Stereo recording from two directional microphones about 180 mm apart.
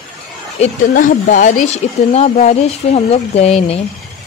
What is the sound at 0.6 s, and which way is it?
Speech, 45° left (ahead or behind).